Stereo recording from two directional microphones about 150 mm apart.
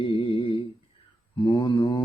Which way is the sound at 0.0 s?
35° left (ahead or behind).